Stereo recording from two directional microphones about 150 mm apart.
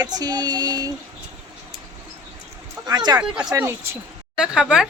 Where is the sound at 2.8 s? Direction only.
25° right (ahead or behind).